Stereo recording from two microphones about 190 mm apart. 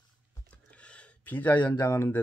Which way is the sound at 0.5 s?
5° left (ahead or behind).